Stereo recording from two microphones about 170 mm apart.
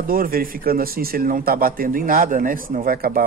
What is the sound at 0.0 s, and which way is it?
A man's voice, 55° right (ahead or behind).